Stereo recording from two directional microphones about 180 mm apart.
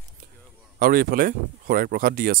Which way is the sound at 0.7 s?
55° right (ahead or behind).